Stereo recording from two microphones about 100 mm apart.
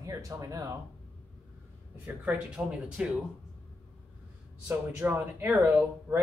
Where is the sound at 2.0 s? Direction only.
15° right (ahead or behind).